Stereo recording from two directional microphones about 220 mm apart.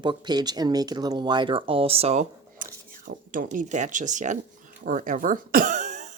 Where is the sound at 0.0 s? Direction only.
20° right (ahead or behind).